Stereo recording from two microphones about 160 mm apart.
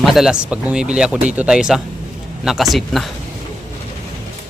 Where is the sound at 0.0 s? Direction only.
Centre (ahead or behind).